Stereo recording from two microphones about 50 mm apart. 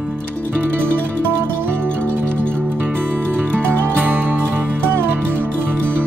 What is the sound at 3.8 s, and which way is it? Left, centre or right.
Music, right.